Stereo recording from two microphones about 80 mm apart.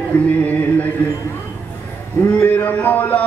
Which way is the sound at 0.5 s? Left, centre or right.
Centre.